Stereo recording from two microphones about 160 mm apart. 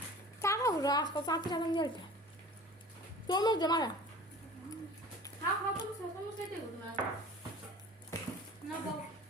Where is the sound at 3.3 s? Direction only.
25° left (ahead or behind).